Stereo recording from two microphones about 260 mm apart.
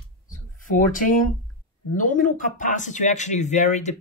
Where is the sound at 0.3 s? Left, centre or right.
Left.